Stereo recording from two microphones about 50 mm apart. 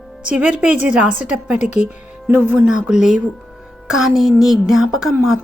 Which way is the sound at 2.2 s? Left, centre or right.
Right.